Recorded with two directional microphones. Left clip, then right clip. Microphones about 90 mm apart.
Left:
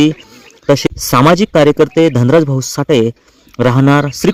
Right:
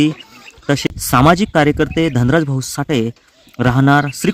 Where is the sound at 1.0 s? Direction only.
25° left (ahead or behind).